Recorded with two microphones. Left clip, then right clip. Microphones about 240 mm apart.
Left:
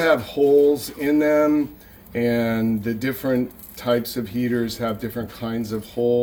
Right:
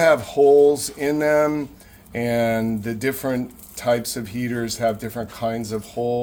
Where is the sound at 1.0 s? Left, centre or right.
Right.